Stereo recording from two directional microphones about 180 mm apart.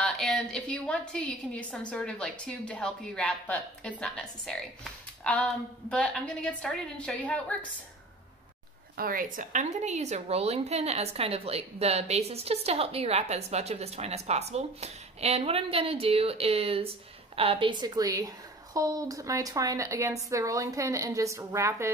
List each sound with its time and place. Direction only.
0.0 s a woman's voice: 5° left (ahead or behind)
8.9 s a woman's voice: 55° right (ahead or behind); by 21.9 s 15° right (ahead or behind)